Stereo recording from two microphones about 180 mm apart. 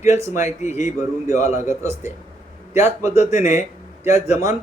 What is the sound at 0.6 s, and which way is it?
Speech, 40° left (ahead or behind).